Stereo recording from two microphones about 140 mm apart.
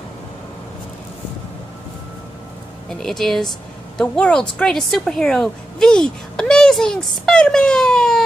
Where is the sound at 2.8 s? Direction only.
5° left (ahead or behind).